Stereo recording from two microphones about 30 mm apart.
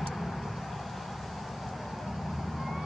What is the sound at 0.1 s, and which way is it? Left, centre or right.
Vehicle, centre.